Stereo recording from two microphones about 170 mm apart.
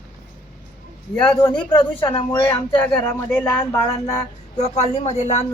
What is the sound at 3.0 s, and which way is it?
Speech, 10° left (ahead or behind).